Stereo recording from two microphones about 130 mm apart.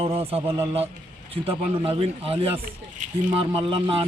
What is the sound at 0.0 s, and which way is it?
Speech, 45° right (ahead or behind).